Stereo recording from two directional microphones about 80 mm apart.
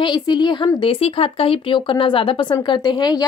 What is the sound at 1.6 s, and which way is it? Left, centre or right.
Speech, left.